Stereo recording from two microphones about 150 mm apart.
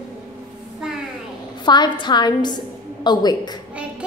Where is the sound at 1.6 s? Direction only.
30° left (ahead or behind).